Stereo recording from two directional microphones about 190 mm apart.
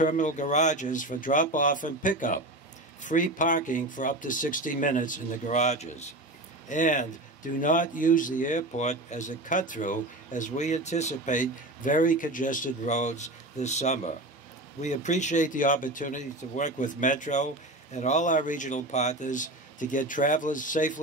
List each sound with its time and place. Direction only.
0.0 s speech: 40° left (ahead or behind)